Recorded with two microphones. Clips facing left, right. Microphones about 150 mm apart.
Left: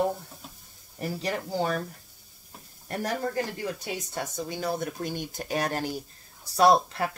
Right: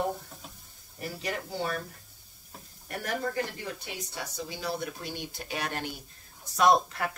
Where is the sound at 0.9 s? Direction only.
35° left (ahead or behind).